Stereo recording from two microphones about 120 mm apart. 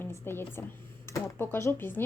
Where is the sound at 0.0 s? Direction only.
20° left (ahead or behind).